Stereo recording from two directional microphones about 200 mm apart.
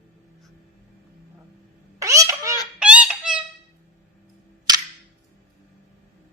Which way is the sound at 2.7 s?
5° right (ahead or behind).